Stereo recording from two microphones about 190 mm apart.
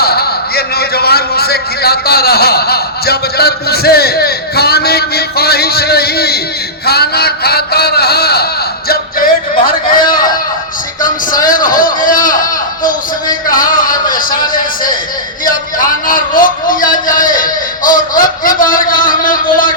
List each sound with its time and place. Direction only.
0.0 s a man's voice: 55° left (ahead or behind)
6.8 s a sound: 55° left (ahead or behind)
8.9 s speech: 50° left (ahead or behind)
11.4 s a man's voice: 45° left (ahead or behind)